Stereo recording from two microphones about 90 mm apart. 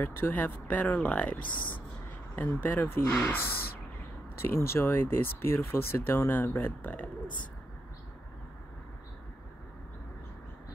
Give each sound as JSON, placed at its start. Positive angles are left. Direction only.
{"t": 0.0, "sound": "speech", "side_deg": 25}